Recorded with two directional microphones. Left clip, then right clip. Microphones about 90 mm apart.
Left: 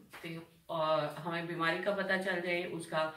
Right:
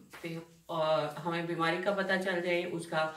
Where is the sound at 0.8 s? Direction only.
35° right (ahead or behind).